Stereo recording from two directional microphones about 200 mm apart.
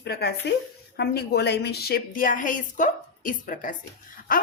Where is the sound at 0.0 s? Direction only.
55° left (ahead or behind).